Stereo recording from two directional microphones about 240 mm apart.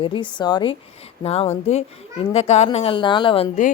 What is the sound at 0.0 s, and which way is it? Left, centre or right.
A woman's voice, centre.